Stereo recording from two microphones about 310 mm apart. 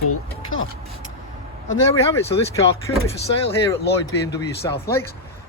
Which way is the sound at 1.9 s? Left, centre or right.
Centre.